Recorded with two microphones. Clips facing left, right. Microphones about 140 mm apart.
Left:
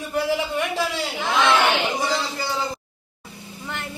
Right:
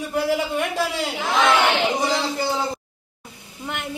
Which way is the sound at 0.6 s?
5° right (ahead or behind).